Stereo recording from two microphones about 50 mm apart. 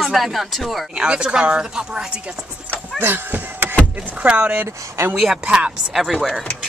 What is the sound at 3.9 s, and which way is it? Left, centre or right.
Speech, right.